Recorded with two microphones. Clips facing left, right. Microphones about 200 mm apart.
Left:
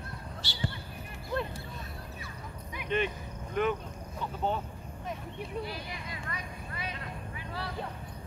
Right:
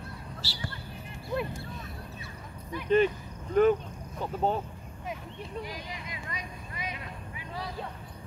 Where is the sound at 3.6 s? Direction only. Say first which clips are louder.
Right 8 dB; 40° right (ahead or behind).